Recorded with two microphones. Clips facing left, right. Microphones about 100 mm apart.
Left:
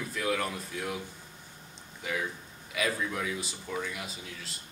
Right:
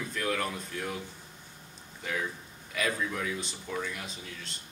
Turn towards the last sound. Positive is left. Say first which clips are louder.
# even
turn(degrees=5)  # may be behind; listen again after turning